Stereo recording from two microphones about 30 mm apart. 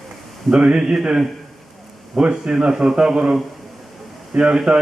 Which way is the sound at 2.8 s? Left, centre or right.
Right.